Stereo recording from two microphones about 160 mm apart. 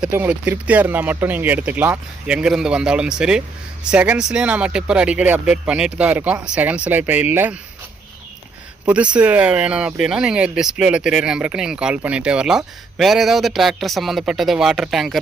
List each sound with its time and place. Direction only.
0.0 s speech: 10° right (ahead or behind)
8.9 s speech: 10° right (ahead or behind)